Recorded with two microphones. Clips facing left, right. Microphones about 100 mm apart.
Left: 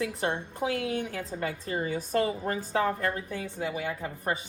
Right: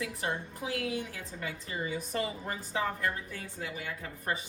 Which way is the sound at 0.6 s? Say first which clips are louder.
Left 6 dB; 45° left (ahead or behind).